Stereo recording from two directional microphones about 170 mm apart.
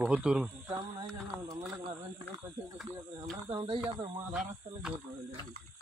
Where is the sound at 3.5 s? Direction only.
25° right (ahead or behind).